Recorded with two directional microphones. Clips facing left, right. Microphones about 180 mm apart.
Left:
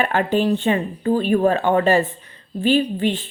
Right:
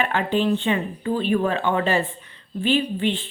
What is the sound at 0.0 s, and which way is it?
A woman's voice, 45° left (ahead or behind).